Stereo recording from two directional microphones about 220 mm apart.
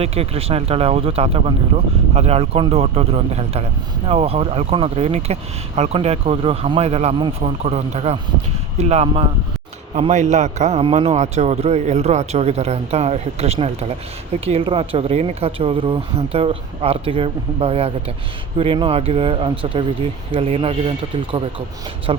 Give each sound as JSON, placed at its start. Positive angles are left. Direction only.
{"t": 0.0, "sound": "a man's voice", "side_deg": -25}